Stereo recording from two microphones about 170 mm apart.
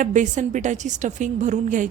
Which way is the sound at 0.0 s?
45° right (ahead or behind).